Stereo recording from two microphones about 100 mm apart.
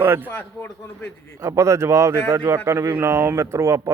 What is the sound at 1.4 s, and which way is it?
Speech, 30° right (ahead or behind).